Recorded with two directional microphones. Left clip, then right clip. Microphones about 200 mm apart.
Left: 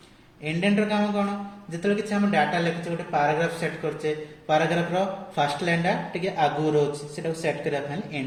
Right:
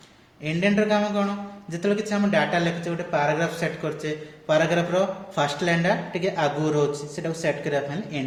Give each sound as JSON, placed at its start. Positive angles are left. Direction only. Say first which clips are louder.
{"t": 0.4, "sound": "speech", "louder": "right 2 dB", "side_deg": -40}